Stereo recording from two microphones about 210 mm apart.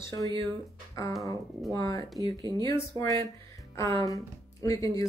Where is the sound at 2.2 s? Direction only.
20° right (ahead or behind).